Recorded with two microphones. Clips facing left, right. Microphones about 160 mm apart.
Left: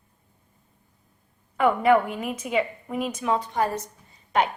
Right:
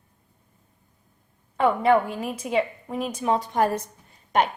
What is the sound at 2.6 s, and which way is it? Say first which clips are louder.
Speech: right 1 dB; centre (ahead or behind).